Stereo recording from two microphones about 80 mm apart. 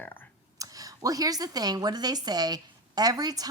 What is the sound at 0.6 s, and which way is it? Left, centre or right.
Speech, right.